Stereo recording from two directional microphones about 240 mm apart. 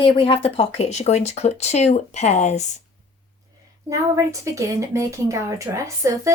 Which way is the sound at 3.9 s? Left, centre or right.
Centre.